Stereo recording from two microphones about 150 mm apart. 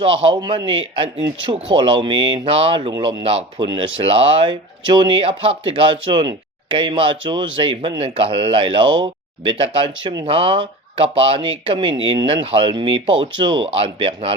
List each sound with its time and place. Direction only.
0.0 s speech: 35° right (ahead or behind)